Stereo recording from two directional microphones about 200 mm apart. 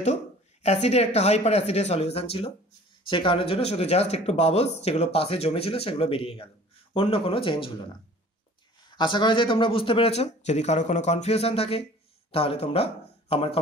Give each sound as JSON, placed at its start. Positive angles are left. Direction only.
{"t": 0.0, "sound": "a woman's voice", "side_deg": 35}
{"t": 8.9, "sound": "speech", "side_deg": 20}